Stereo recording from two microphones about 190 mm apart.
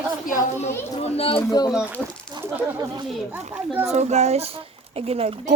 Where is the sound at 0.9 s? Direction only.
30° left (ahead or behind).